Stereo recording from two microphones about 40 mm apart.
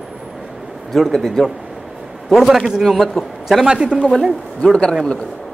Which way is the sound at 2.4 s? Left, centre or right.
Centre.